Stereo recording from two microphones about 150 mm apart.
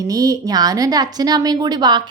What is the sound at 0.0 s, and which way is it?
A woman's voice, 25° right (ahead or behind).